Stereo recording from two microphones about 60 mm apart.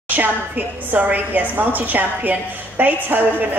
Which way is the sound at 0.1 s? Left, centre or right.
Right.